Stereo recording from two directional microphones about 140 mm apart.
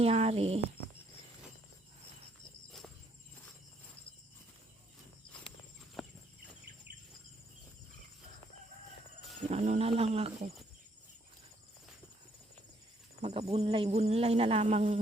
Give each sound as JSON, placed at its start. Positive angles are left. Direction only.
{"t": 0.0, "sound": "speech", "side_deg": -45}
{"t": 6.0, "sound": "chicken", "side_deg": 0}
{"t": 9.5, "sound": "speech", "side_deg": -50}
{"t": 13.2, "sound": "speech", "side_deg": -45}